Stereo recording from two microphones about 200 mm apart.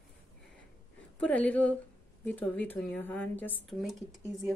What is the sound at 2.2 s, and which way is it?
Speech, 10° left (ahead or behind).